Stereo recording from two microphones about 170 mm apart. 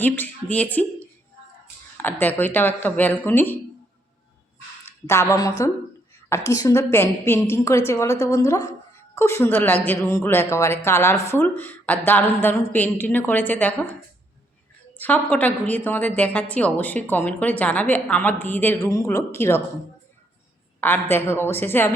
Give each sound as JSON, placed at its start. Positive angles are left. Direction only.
{"t": 0.0, "sound": "speech", "side_deg": 10}
{"t": 5.0, "sound": "a woman's voice", "side_deg": 15}
{"t": 14.9, "sound": "speech", "side_deg": 10}
{"t": 20.8, "sound": "speech", "side_deg": 10}